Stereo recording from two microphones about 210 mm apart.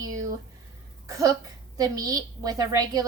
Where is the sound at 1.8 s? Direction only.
15° right (ahead or behind).